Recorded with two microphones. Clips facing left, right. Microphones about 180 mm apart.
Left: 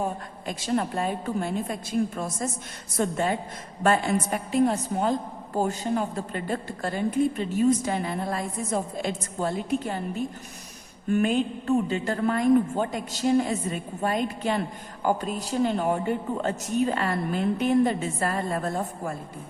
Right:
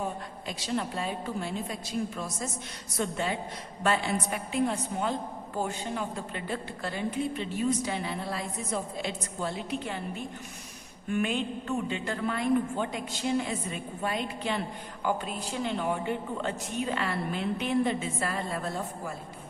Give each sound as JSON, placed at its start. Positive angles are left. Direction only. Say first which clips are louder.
{"t": 0.4, "sound": "a woman's voice", "louder": "left 6 dB", "side_deg": 50}